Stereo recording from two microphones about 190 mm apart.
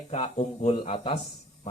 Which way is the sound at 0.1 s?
35° left (ahead or behind).